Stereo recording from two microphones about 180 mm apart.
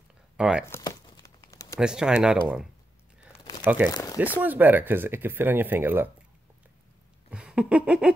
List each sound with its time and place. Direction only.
0.4 s speech: 5° right (ahead or behind)
0.7 s crumpling: 15° left (ahead or behind)
1.8 s speech: 5° right (ahead or behind)
3.3 s crumpling: 20° left (ahead or behind)
3.6 s speech: 10° right (ahead or behind)
3.9 s speech: 20° left (ahead or behind)
4.4 s speech: 10° right (ahead or behind)
7.2 s a sound: 5° right (ahead or behind)